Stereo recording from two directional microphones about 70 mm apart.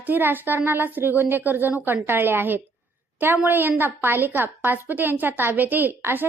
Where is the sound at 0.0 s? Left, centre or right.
Right.